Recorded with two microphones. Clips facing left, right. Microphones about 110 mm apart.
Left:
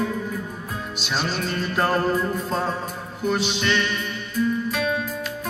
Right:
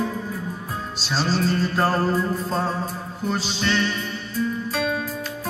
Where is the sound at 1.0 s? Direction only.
35° right (ahead or behind).